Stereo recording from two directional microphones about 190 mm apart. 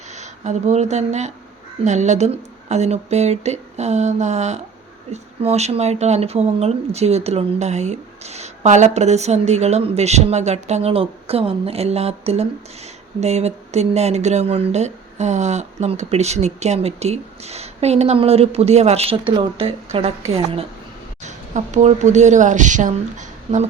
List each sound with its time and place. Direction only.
0.1 s a woman's voice: 35° right (ahead or behind)